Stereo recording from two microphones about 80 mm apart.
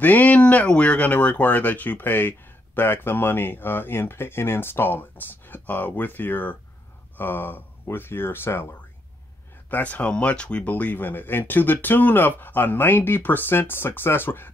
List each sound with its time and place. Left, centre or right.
0.0 s speech: centre
9.7 s speech: left